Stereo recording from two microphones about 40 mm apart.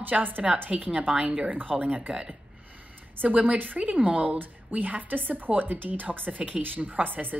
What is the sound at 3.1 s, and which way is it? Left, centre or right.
Speech, right.